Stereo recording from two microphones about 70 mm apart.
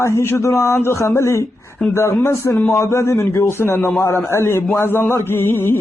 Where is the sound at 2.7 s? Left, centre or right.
Left.